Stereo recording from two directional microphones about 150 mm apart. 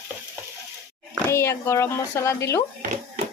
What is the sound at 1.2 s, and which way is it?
Speech, 20° left (ahead or behind).